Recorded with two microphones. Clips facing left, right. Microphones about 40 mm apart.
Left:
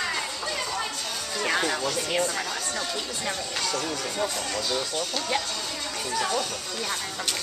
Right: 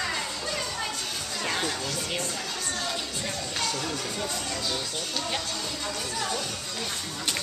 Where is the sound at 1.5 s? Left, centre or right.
Left.